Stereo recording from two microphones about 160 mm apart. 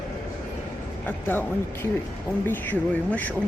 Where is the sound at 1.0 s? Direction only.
10° left (ahead or behind).